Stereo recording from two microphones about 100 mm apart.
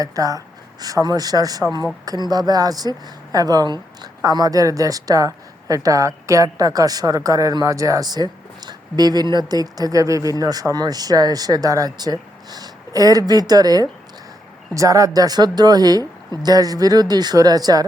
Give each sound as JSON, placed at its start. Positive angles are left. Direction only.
{"t": 0.0, "sound": "a woman's voice", "side_deg": -35}